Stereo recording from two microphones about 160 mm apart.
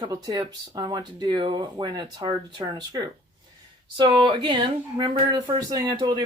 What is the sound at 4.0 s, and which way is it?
Speech, 30° right (ahead or behind).